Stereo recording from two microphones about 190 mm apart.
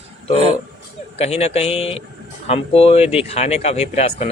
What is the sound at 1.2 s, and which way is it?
Speech, 35° left (ahead or behind).